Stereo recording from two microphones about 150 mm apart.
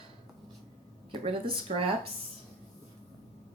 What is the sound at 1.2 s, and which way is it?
Speech, 40° right (ahead or behind).